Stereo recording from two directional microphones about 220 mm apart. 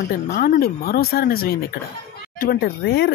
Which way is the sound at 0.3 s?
40° left (ahead or behind).